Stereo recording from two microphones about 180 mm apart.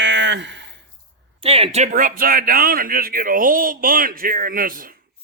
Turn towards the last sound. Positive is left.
turn(degrees=-50)  # may be behind; listen again after turning